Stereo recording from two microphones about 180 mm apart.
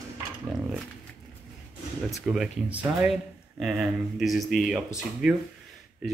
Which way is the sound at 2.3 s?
5° right (ahead or behind).